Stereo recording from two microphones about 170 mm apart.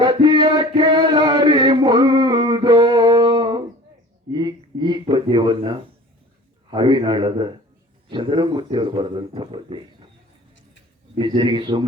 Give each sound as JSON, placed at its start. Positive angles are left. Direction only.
{"t": 0.0, "sound": "a sound", "side_deg": -25}
{"t": 6.7, "sound": "speech", "side_deg": -30}
{"t": 11.2, "sound": "speech", "side_deg": -25}